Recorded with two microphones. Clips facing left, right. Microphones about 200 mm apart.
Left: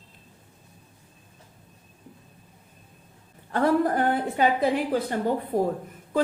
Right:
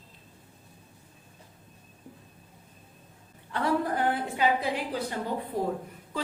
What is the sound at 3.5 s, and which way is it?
A woman's voice, 45° left (ahead or behind).